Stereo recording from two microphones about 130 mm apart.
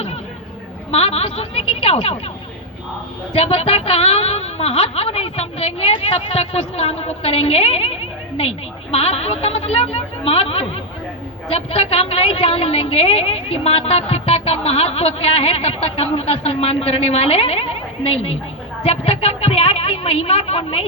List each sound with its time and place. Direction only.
0.9 s a woman's voice: 50° left (ahead or behind)
3.3 s a woman's voice: 50° left (ahead or behind)